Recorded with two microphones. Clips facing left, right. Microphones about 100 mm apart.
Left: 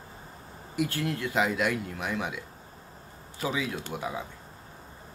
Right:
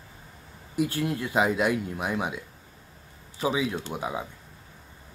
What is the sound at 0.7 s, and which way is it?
Speech, 20° right (ahead or behind).